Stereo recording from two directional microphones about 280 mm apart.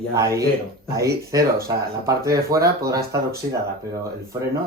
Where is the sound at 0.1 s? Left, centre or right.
Centre.